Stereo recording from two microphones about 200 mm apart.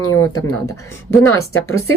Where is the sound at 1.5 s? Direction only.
90° left.